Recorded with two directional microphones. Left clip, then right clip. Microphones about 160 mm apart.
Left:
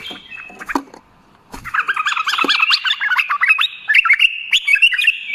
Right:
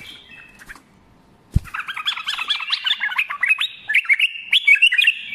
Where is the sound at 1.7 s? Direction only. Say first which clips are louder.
Left 8 dB; 45° right (ahead or behind).